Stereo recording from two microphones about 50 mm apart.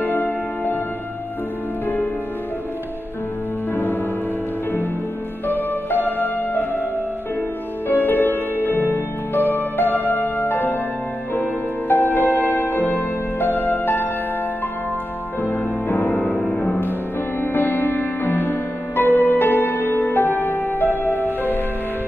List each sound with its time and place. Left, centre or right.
0.0 s music: left
3.7 s music: left
5.5 s music: left
7.9 s music: left
11.9 s music: left
15.4 s music: left
17.4 s music: left